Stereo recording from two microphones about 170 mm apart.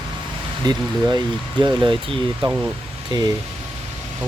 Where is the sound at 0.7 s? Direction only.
25° right (ahead or behind).